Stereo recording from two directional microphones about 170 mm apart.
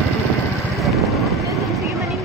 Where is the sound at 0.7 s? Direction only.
Centre (ahead or behind).